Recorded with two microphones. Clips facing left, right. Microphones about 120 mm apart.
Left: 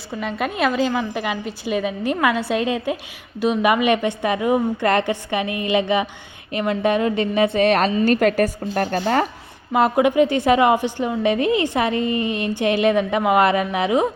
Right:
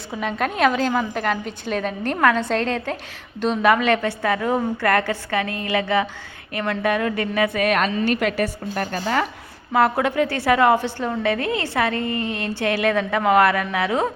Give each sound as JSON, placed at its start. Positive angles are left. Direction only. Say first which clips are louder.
{"t": 0.1, "sound": "a woman's voice", "louder": "even", "side_deg": 0}
{"t": 9.7, "sound": "a woman's voice", "louder": "left 3 dB", "side_deg": 15}